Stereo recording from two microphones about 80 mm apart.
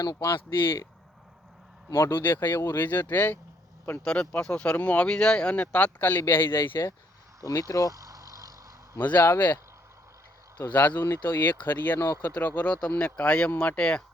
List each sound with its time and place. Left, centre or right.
1.9 s speech: left
7.4 s speech: left
7.9 s vehicle: right
9.1 s speech: left
10.7 s speech: left
11.9 s speech: left
12.2 s speech: left